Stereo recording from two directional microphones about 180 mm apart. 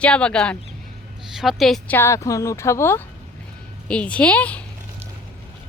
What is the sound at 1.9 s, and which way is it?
Speech, 15° left (ahead or behind).